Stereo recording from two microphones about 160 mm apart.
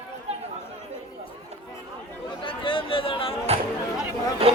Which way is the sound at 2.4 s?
35° left (ahead or behind).